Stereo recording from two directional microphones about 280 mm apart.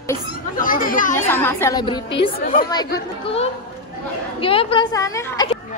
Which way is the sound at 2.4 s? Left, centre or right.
Left.